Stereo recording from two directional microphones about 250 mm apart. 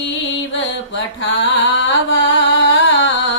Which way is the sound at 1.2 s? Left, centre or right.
Left.